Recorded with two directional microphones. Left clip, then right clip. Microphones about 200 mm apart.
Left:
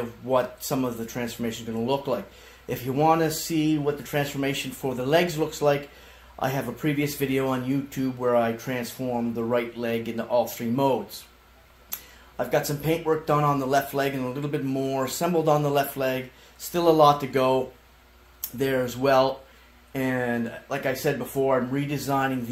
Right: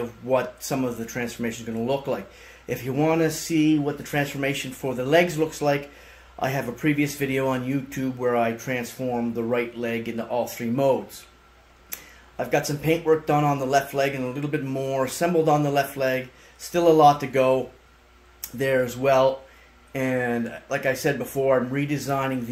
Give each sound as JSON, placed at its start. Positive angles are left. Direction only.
{"t": 0.3, "sound": "speech", "side_deg": -20}
{"t": 11.9, "sound": "speech", "side_deg": -15}
{"t": 18.6, "sound": "speech", "side_deg": -15}